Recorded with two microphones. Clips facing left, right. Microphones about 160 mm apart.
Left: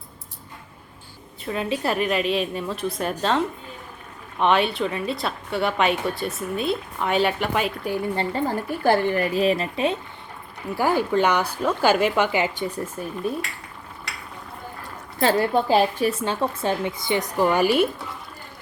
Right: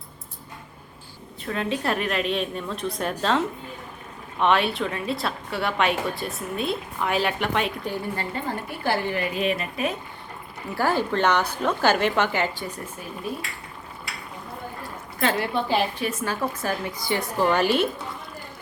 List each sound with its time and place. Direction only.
1.5 s a woman's voice: 5° left (ahead or behind)
8.1 s a woman's voice: 30° left (ahead or behind)
8.8 s speech: 45° left (ahead or behind); by 10.0 s 30° left (ahead or behind)
10.8 s a woman's voice: 15° left (ahead or behind)
15.2 s speech: 35° left (ahead or behind)
16.2 s a woman's voice: 25° left (ahead or behind)